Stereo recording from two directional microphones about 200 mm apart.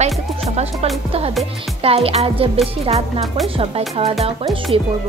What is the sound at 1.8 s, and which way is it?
A woman's voice, 30° right (ahead or behind).